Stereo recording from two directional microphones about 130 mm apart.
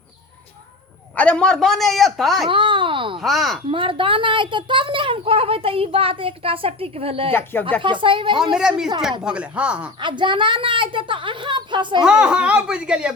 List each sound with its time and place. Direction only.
1.1 s a man's voice: 10° left (ahead or behind)
2.5 s a child's voice: 40° right (ahead or behind)
3.2 s a man's voice: centre (ahead or behind)
3.7 s a child's voice: 45° right (ahead or behind)
8.4 s a man's voice: 5° right (ahead or behind)
10.0 s a woman's voice: 35° right (ahead or behind)
12.0 s speech: 5° right (ahead or behind)